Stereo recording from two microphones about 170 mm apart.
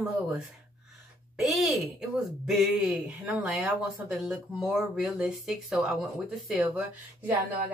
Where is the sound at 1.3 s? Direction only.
Centre (ahead or behind).